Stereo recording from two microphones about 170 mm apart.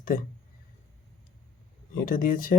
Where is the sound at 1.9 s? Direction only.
55° left (ahead or behind).